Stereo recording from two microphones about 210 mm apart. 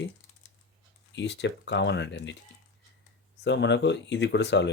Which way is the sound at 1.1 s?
55° left (ahead or behind).